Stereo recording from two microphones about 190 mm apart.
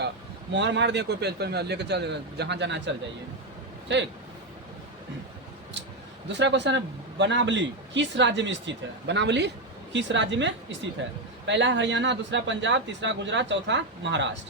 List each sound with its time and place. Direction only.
0.5 s speech: 65° right (ahead or behind)
6.2 s speech: 70° right (ahead or behind)